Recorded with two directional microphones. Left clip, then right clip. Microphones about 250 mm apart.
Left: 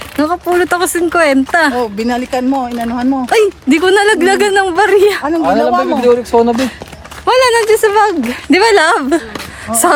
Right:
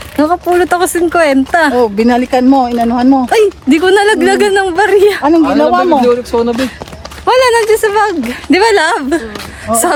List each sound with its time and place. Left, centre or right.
0.2 s speech: centre
1.8 s speech: right
3.2 s speech: centre
6.0 s speech: left
7.3 s speech: centre
9.7 s speech: right